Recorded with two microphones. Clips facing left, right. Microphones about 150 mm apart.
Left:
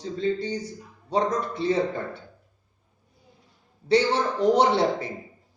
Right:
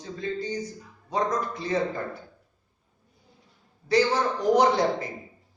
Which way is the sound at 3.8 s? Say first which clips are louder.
Left 1 dB; 30° left (ahead or behind).